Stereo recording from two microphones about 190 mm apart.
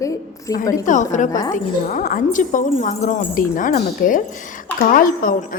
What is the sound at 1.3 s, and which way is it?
Speech, 20° left (ahead or behind).